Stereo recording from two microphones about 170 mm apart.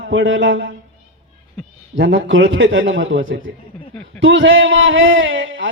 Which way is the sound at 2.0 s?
90° right.